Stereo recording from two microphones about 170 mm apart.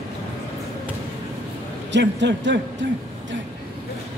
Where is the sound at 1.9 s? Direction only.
90° right.